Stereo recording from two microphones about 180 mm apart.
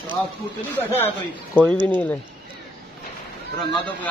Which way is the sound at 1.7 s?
10° left (ahead or behind).